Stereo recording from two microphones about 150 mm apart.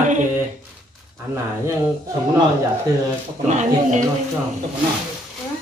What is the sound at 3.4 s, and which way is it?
Speech, 50° right (ahead or behind).